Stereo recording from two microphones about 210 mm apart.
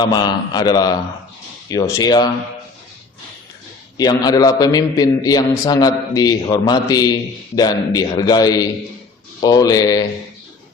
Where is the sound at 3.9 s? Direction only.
20° left (ahead or behind).